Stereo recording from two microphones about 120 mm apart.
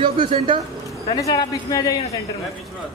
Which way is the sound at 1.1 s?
30° left (ahead or behind).